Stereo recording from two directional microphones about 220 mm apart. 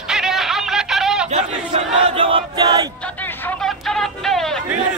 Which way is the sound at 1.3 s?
30° right (ahead or behind).